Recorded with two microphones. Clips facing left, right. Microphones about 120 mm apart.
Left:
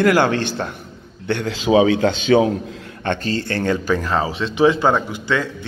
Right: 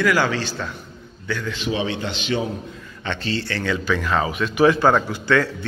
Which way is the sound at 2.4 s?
90° left.